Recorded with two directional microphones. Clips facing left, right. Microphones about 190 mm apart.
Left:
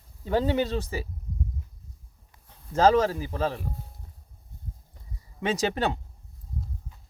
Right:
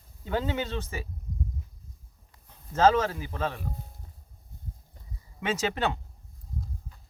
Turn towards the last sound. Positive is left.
turn(degrees=35)  # may be behind; listen again after turning